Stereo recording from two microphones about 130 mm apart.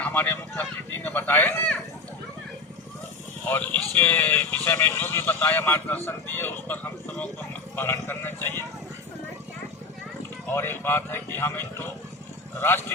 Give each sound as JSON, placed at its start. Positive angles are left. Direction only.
{"t": 0.0, "sound": "speech", "side_deg": 15}
{"t": 3.4, "sound": "speech", "side_deg": 15}
{"t": 7.8, "sound": "speech", "side_deg": 15}
{"t": 10.5, "sound": "speech", "side_deg": 15}